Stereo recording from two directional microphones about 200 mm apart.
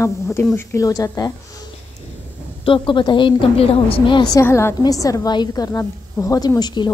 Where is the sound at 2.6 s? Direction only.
25° left (ahead or behind).